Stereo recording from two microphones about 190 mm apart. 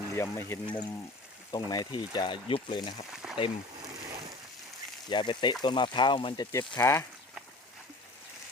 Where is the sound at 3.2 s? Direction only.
5° right (ahead or behind).